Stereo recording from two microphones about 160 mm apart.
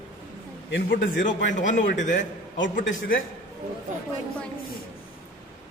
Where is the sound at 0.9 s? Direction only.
55° left (ahead or behind).